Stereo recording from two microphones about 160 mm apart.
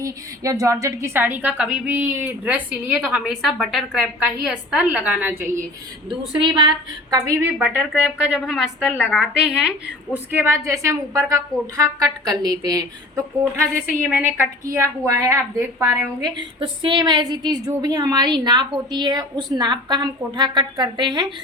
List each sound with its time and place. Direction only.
0.0 s a woman's voice: 20° right (ahead or behind)
6.1 s a woman's voice: 30° right (ahead or behind)
8.3 s a woman's voice: 5° right (ahead or behind)
10.3 s a woman's voice: 15° right (ahead or behind)
13.4 s a woman's voice: 10° right (ahead or behind)
16.2 s a woman's voice: 30° right (ahead or behind)